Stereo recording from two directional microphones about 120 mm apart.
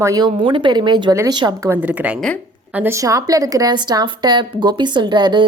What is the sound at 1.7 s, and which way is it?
Speech, 10° right (ahead or behind).